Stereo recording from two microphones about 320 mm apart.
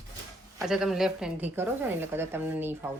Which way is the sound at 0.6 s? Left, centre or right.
Centre.